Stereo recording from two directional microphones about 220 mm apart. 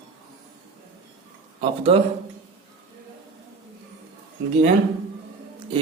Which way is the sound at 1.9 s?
25° right (ahead or behind).